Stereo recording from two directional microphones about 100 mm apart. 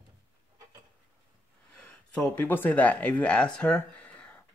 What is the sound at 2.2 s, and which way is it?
Speech, 20° left (ahead or behind).